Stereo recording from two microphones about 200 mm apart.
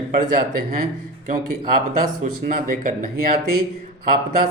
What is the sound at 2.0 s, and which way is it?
Speech, 45° right (ahead or behind).